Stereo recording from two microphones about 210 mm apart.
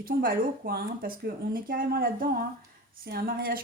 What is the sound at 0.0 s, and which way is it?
Speech, 45° right (ahead or behind).